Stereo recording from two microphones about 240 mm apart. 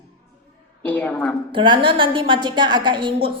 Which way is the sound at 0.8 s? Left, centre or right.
Centre.